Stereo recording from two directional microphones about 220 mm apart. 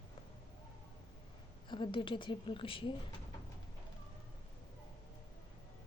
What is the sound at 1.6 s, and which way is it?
A woman's voice, 20° left (ahead or behind).